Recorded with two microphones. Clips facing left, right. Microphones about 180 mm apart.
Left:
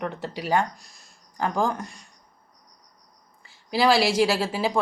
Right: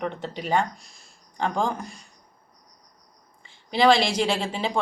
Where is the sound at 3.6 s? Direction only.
5° left (ahead or behind).